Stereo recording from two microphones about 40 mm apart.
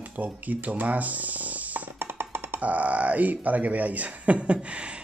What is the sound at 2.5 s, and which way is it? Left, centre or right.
Speech, right.